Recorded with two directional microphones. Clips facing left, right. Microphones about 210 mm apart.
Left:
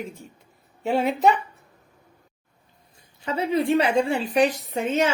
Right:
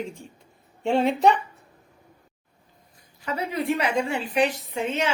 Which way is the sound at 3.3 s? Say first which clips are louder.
Left 5 dB; 30° left (ahead or behind).